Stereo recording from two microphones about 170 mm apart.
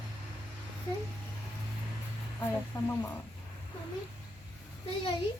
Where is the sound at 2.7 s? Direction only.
20° left (ahead or behind).